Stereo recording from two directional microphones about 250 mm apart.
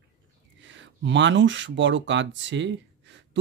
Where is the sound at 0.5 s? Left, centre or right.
Right.